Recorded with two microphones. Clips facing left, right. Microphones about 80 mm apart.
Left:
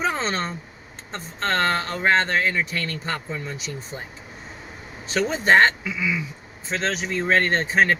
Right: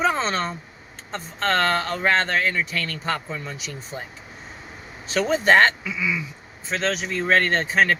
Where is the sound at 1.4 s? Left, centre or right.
Left.